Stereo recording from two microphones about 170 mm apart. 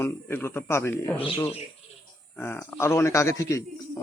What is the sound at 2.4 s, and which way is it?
Speech, 15° left (ahead or behind).